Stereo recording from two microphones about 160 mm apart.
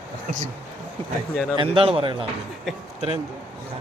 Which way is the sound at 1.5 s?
35° right (ahead or behind).